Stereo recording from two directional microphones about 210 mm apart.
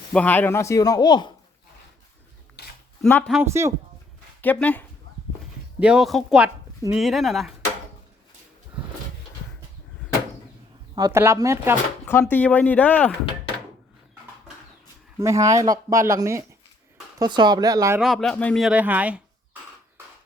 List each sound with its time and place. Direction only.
0.1 s speech: 5° left (ahead or behind)
2.6 s a sound: 50° left (ahead or behind)
3.0 s speech: 5° left (ahead or behind)
3.4 s speech: 15° right (ahead or behind)
4.4 s speech: 10° left (ahead or behind)
5.8 s speech: 5° right (ahead or behind)
8.8 s a sound: 5° right (ahead or behind)
10.9 s speech: 15° right (ahead or behind)
12.0 s speech: 10° left (ahead or behind)
15.2 s speech: 15° right (ahead or behind)
18.0 s speech: centre (ahead or behind)